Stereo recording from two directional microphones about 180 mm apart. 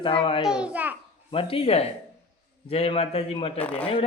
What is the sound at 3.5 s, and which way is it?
Speech, 10° left (ahead or behind).